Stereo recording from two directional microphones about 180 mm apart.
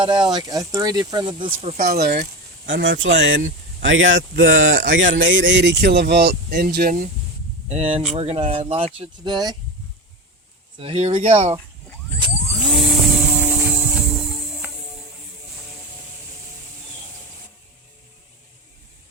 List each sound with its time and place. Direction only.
0.0 s speech: 25° right (ahead or behind)
1.6 s speech: 40° right (ahead or behind)
2.0 s speech: 60° right (ahead or behind)
2.6 s speech: 80° right; by 6.9 s 60° right (ahead or behind)
7.7 s speech: 35° right (ahead or behind)
10.8 s speech: 35° right (ahead or behind)
12.6 s a sound: centre (ahead or behind)
14.6 s music: 10° right (ahead or behind)